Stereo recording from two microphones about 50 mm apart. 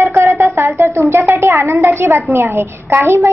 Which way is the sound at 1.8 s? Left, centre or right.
Right.